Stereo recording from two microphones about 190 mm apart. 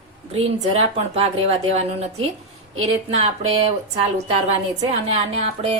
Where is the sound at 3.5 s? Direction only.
30° right (ahead or behind).